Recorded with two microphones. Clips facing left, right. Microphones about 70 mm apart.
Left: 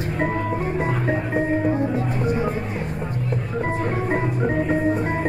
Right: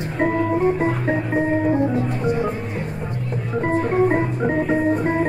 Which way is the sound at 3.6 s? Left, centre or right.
Right.